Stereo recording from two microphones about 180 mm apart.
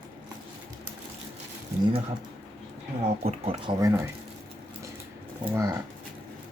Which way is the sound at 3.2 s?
30° right (ahead or behind).